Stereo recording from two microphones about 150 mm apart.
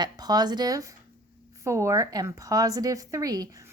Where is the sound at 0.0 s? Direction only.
25° right (ahead or behind).